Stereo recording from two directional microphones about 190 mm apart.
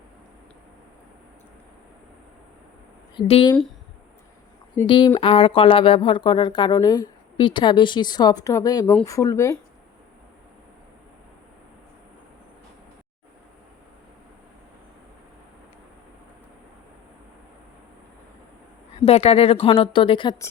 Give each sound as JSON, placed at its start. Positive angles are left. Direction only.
{"t": 3.2, "sound": "speech", "side_deg": 30}
{"t": 4.9, "sound": "speech", "side_deg": 25}
{"t": 19.0, "sound": "speech", "side_deg": 30}